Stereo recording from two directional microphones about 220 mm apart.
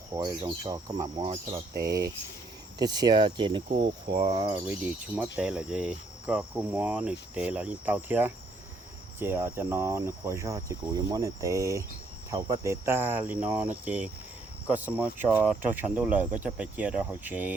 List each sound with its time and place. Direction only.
0.1 s speech: 15° right (ahead or behind)
1.7 s speech: 45° right (ahead or behind)
2.7 s speech: 20° right (ahead or behind)